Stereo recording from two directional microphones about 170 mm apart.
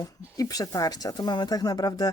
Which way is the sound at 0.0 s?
20° left (ahead or behind).